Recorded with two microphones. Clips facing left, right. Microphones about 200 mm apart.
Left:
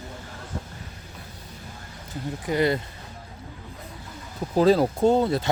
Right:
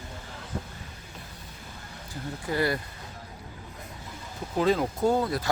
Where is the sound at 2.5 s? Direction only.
20° left (ahead or behind).